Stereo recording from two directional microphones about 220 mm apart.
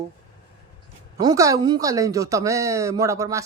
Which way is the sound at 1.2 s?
15° right (ahead or behind).